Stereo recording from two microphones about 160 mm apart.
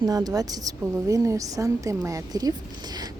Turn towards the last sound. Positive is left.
turn(degrees=-25)  # may be behind; listen again after turning